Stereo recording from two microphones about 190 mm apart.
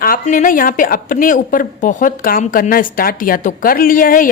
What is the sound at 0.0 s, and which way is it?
A woman's voice, 45° left (ahead or behind).